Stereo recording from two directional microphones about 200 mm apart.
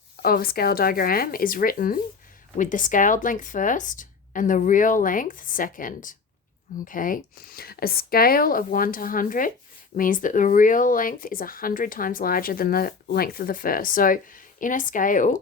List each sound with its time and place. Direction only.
0.2 s speech: 50° left (ahead or behind)